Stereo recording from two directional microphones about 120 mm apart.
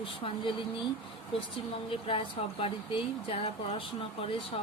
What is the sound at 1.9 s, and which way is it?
A woman's voice, 50° left (ahead or behind).